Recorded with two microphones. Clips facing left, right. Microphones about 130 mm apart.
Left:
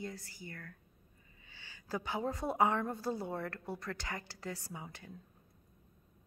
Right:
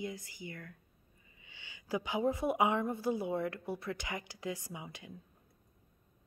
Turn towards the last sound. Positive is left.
turn(degrees=-15)  # may be behind; listen again after turning